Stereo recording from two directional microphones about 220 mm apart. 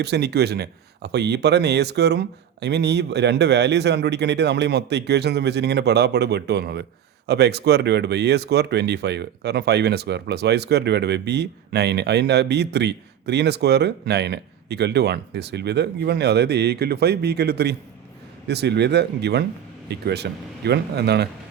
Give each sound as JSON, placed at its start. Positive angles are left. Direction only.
{"t": 0.0, "sound": "speech", "side_deg": -50}